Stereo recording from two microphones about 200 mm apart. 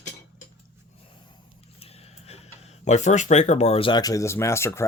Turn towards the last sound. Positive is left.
turn(degrees=15)  # may be behind; listen again after turning